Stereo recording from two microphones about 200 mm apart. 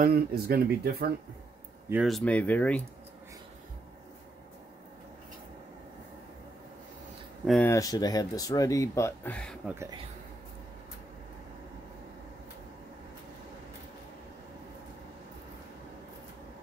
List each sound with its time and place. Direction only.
0.0 s speech: 50° right (ahead or behind)
1.9 s speech: 5° right (ahead or behind)
7.4 s speech: 5° left (ahead or behind)
7.7 s speech: 20° left (ahead or behind)
9.7 s speech: 15° right (ahead or behind)